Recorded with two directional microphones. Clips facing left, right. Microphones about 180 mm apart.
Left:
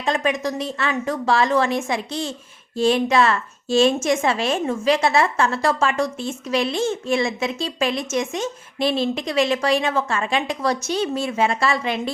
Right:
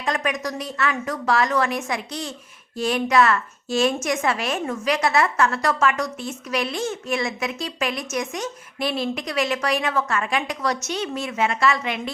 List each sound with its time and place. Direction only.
0.0 s a woman's voice: 25° left (ahead or behind)